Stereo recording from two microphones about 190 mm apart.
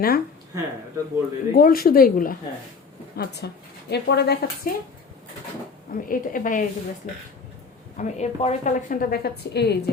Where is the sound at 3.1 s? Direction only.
60° left (ahead or behind).